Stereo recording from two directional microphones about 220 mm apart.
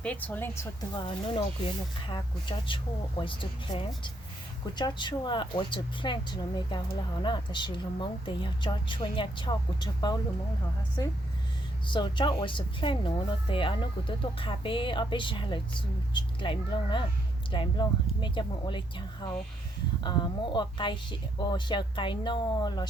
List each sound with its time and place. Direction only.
0.0 s speech: 5° left (ahead or behind)